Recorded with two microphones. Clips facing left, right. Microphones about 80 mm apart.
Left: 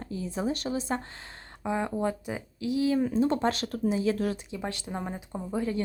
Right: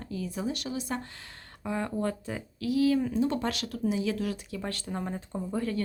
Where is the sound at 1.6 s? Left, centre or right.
Centre; by 4.4 s left.